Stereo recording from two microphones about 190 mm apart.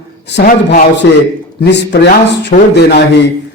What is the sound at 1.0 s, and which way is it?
A man's voice, 65° left (ahead or behind).